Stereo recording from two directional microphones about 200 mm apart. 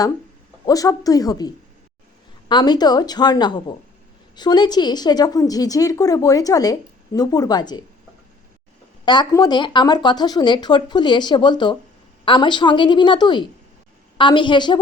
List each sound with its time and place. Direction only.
0.6 s speech: 15° left (ahead or behind)
9.0 s speech: 20° left (ahead or behind)